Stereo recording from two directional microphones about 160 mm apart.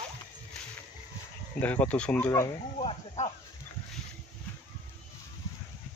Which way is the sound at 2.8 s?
45° left (ahead or behind).